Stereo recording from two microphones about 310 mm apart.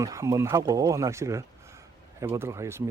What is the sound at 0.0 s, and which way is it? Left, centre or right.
A man's voice, centre.